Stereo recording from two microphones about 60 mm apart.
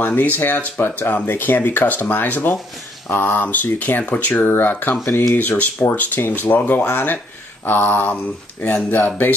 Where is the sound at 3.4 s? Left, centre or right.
Left.